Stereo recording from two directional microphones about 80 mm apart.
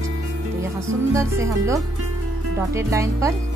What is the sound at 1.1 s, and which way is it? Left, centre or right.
A woman's voice, right.